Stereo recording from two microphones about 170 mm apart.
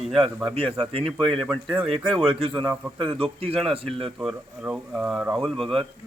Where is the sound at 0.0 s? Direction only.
Centre (ahead or behind).